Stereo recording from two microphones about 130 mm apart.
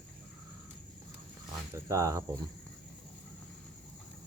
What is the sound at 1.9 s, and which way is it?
Speech, 25° right (ahead or behind).